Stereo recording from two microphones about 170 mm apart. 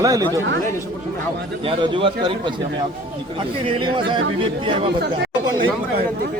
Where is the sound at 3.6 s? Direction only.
30° right (ahead or behind).